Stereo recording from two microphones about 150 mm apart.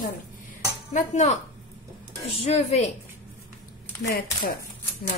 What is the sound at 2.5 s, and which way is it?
Speech, 45° left (ahead or behind).